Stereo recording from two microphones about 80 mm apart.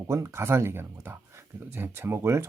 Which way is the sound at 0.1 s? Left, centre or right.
Right.